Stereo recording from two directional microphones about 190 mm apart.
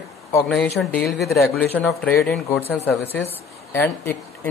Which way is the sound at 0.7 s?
Centre (ahead or behind).